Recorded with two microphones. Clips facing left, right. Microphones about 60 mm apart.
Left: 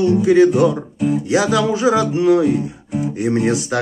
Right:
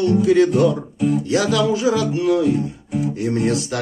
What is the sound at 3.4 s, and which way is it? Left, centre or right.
Music, left.